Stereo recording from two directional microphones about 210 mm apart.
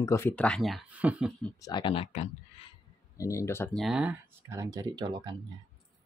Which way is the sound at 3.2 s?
15° left (ahead or behind).